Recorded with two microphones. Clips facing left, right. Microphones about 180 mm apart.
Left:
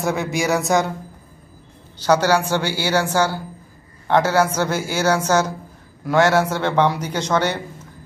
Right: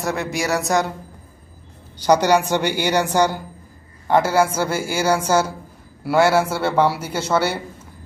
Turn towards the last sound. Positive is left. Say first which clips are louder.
# even
turn(degrees=-10)  # may be behind; listen again after turning